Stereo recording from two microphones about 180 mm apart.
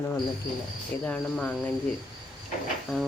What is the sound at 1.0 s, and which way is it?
Speech, 5° left (ahead or behind).